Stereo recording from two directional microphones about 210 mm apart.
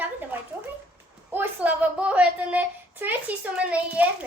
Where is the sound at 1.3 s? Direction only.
10° right (ahead or behind).